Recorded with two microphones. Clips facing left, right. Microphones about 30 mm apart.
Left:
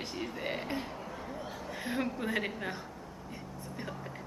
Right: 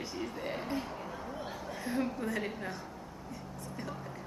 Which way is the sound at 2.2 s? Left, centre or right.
Left.